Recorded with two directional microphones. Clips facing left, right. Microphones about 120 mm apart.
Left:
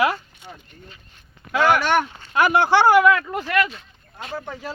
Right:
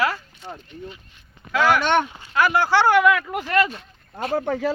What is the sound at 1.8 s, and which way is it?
Speech, 25° right (ahead or behind).